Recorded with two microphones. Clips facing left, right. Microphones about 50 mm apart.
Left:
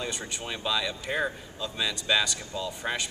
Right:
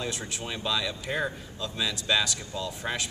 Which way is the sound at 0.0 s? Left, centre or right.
Centre.